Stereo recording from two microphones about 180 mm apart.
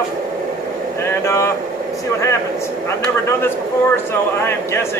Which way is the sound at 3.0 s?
15° left (ahead or behind).